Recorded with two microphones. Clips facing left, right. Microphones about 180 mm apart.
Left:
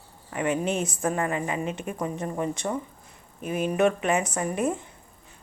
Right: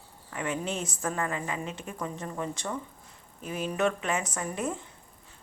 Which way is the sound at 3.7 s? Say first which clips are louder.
Left 5 dB; 15° left (ahead or behind).